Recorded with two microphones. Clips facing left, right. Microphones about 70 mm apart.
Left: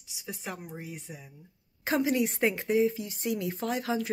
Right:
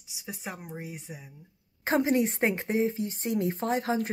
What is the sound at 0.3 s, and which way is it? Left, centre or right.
Speech, centre.